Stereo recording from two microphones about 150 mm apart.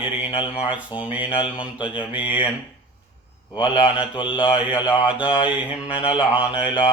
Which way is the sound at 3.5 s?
35° left (ahead or behind).